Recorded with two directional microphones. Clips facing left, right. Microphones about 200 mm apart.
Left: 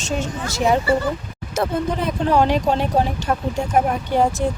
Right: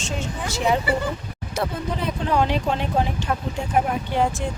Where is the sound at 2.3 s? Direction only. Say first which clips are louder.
Left 4 dB; 45° left (ahead or behind).